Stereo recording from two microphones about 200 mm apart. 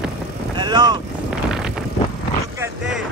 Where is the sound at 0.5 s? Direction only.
20° right (ahead or behind).